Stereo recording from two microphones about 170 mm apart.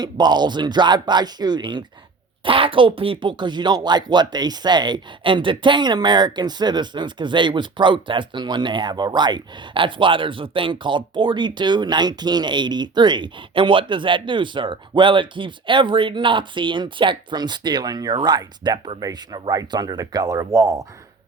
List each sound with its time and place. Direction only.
0.0 s speech: 25° right (ahead or behind)